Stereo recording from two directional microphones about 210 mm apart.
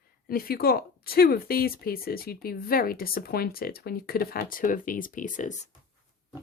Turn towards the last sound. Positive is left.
turn(degrees=35)  # may be behind; listen again after turning